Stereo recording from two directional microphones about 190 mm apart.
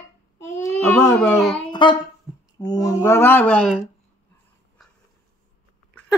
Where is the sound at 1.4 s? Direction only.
5° left (ahead or behind).